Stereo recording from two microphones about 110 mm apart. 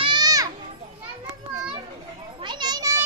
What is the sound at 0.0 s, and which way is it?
Children playing, 45° right (ahead or behind).